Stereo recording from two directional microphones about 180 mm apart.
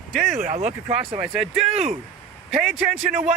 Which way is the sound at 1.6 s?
40° right (ahead or behind).